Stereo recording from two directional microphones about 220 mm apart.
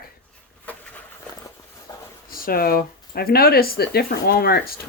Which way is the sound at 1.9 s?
15° left (ahead or behind).